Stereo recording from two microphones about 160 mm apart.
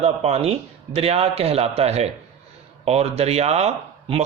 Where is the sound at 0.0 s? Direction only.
40° right (ahead or behind).